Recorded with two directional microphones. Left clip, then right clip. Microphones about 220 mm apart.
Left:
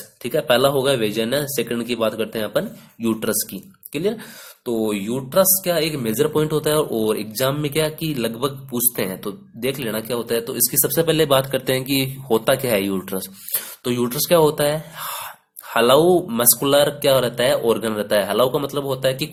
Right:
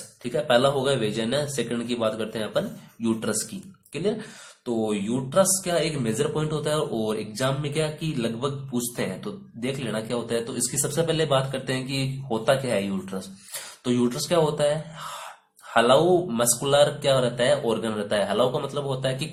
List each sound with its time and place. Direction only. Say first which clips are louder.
0.2 s speech: left 4 dB; 40° left (ahead or behind)